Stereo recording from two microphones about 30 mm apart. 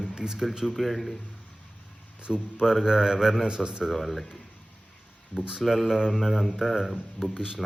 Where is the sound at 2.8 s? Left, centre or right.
Right.